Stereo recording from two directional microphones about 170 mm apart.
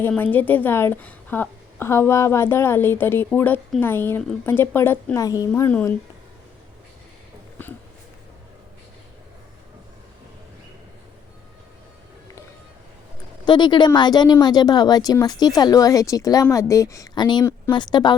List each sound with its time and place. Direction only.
0.1 s a woman's voice: 10° left (ahead or behind)
5.5 s a woman's voice: 10° left (ahead or behind)
13.4 s speech: 25° left (ahead or behind)